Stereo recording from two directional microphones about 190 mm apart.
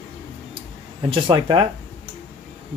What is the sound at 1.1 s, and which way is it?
Speech, 25° right (ahead or behind).